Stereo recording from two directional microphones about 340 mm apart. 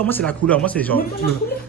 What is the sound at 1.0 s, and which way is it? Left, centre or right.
Speech, left.